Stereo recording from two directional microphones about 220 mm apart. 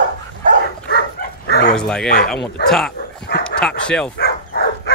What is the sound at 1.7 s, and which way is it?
Speech, 5° left (ahead or behind).